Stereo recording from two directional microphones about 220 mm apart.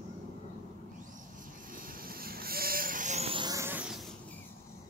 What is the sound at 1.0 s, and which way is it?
Sheep, 35° right (ahead or behind).